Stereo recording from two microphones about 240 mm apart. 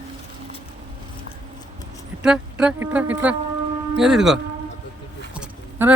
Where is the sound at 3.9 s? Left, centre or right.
Centre.